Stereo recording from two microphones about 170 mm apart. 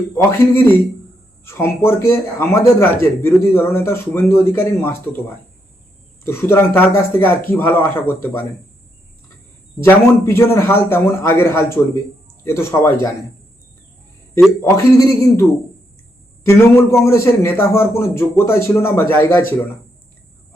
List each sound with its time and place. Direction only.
0.1 s a man's voice: 15° left (ahead or behind)
6.2 s a man's voice: 15° left (ahead or behind)
9.8 s a man's voice: 10° left (ahead or behind)
14.6 s a man's voice: 20° left (ahead or behind)
16.5 s a man's voice: 15° left (ahead or behind)